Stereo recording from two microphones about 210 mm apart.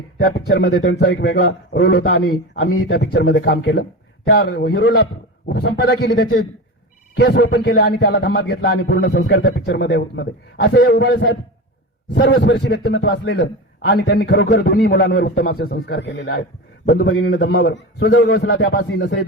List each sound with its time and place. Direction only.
0.2 s a man's voice: 50° left (ahead or behind)